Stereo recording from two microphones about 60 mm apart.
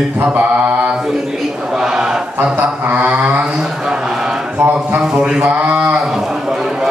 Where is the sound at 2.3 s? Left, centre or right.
Right.